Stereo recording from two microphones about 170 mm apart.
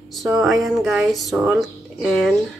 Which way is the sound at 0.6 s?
Centre (ahead or behind).